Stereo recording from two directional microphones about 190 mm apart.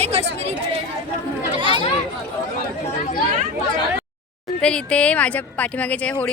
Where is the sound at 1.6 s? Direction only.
25° right (ahead or behind).